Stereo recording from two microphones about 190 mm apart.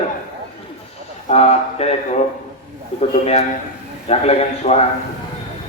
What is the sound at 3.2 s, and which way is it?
Speech, 35° left (ahead or behind).